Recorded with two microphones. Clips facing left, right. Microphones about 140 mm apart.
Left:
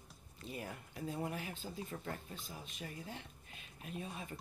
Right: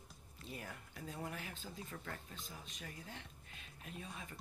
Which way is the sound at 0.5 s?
20° left (ahead or behind).